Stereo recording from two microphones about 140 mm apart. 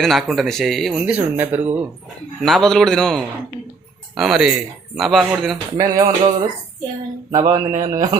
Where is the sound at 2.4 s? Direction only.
5° left (ahead or behind).